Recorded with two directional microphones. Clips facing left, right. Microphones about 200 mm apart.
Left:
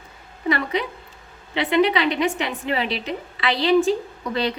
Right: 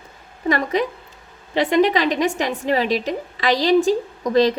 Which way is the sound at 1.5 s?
40° right (ahead or behind).